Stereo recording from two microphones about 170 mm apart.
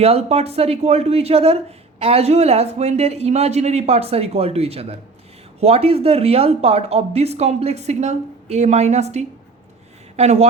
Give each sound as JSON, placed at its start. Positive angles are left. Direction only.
{"t": 0.0, "sound": "speech", "side_deg": -35}